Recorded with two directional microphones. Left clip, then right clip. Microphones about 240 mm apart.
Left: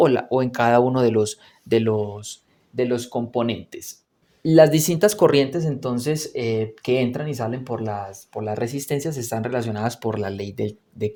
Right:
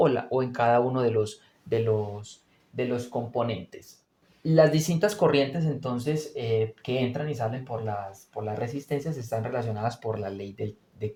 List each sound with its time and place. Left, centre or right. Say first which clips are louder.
0.0 s speech: left 6 dB; left